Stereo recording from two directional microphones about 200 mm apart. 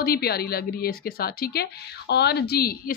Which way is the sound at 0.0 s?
50° left (ahead or behind).